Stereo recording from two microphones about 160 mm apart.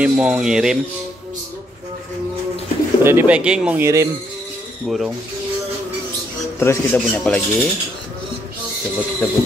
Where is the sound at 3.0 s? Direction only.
10° right (ahead or behind).